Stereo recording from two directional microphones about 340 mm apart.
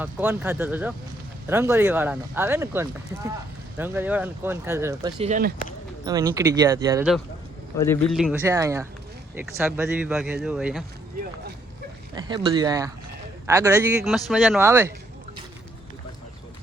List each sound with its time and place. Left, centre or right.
0.0 s speech: centre; by 5.5 s right
6.1 s speech: centre
12.1 s speech: centre